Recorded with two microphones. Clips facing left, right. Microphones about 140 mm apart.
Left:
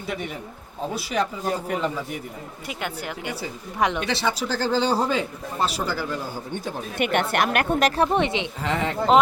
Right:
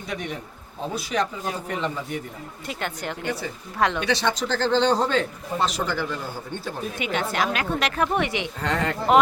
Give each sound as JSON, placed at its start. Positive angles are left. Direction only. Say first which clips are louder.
{"t": 0.1, "sound": "a man's voice", "louder": "left 1 dB", "side_deg": 5}
{"t": 4.0, "sound": "a man's voice", "louder": "right 1 dB", "side_deg": 5}
{"t": 7.0, "sound": "speech", "louder": "left 4 dB", "side_deg": 60}
{"t": 8.6, "sound": "speech", "louder": "right 1 dB", "side_deg": 0}